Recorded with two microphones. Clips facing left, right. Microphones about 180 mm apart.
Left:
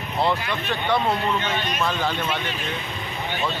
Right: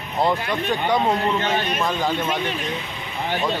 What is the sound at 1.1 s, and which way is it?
Speech, 40° right (ahead or behind).